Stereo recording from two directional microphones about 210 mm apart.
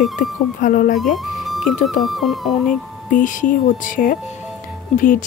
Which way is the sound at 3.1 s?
40° left (ahead or behind).